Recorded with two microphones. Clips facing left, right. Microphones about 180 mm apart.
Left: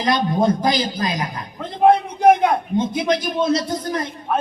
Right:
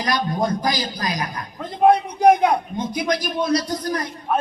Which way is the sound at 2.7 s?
25° left (ahead or behind).